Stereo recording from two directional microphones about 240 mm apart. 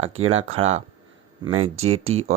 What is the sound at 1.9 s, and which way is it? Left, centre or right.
Speech, right.